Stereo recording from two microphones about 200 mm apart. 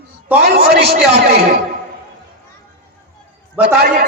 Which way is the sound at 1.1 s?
55° right (ahead or behind).